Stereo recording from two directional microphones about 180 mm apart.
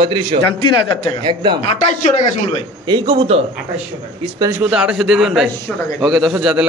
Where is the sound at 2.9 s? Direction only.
30° right (ahead or behind).